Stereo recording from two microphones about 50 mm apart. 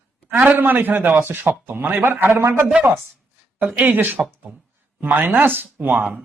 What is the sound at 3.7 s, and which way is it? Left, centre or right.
Speech, right.